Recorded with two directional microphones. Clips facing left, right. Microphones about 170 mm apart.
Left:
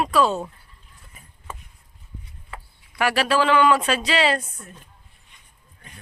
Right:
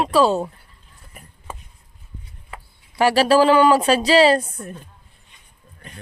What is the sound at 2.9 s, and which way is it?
Speech, 30° right (ahead or behind).